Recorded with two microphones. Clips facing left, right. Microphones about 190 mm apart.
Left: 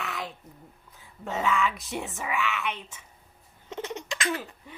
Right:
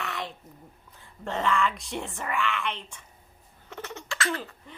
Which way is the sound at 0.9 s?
5° left (ahead or behind).